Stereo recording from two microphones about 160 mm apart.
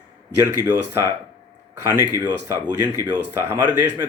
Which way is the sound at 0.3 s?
15° right (ahead or behind).